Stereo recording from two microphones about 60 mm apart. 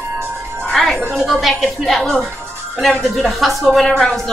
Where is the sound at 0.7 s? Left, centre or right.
Centre.